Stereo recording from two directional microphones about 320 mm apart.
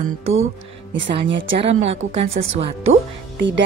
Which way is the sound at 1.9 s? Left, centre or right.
Centre.